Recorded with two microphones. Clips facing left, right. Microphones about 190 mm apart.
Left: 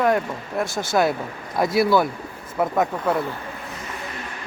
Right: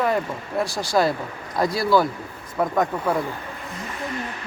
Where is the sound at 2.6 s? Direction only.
5° left (ahead or behind).